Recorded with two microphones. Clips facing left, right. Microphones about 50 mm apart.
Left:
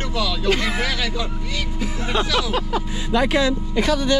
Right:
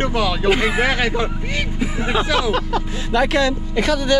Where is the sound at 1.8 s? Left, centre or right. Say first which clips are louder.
Right 5 dB; right.